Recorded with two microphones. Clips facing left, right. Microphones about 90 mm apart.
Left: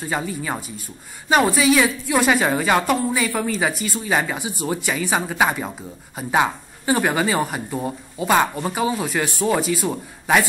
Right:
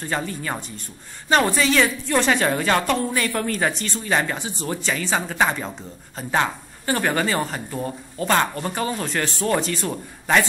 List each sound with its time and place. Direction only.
0.0 s speech: 5° left (ahead or behind)